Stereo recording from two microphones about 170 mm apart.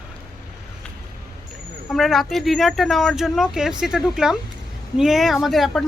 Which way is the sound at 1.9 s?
Centre (ahead or behind).